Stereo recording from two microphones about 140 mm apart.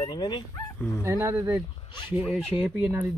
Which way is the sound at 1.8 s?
35° left (ahead or behind).